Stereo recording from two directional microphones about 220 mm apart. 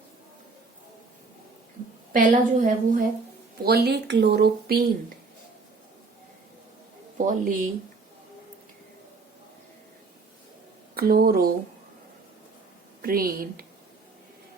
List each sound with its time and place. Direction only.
2.1 s a woman's voice: 35° right (ahead or behind)
3.6 s speech: 45° right (ahead or behind)
7.3 s a woman's voice: 35° right (ahead or behind)
10.9 s speech: 40° right (ahead or behind)
13.0 s a woman's voice: 40° right (ahead or behind)